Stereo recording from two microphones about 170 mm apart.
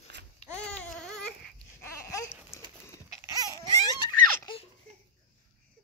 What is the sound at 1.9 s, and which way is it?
Babbling, 15° left (ahead or behind).